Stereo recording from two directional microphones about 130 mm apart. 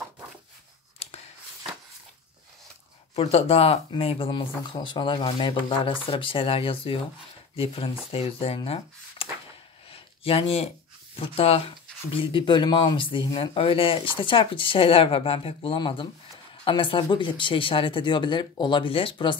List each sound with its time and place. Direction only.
3.2 s speech: 50° left (ahead or behind)
9.8 s a sound: 45° left (ahead or behind)
11.1 s speech: 50° left (ahead or behind)